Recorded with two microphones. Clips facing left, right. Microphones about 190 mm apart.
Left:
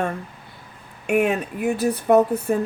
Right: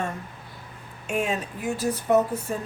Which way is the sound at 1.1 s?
60° left (ahead or behind).